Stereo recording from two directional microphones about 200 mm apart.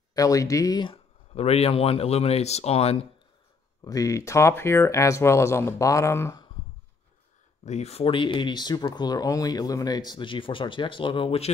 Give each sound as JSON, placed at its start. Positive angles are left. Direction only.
{"t": 0.1, "sound": "speech", "side_deg": 15}
{"t": 3.8, "sound": "speech", "side_deg": 15}
{"t": 7.6, "sound": "speech", "side_deg": 35}